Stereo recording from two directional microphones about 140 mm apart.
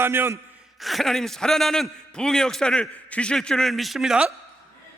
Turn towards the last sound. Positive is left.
turn(degrees=-5)  # may be behind; listen again after turning